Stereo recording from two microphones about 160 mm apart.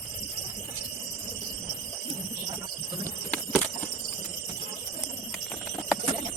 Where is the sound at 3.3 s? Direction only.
10° left (ahead or behind).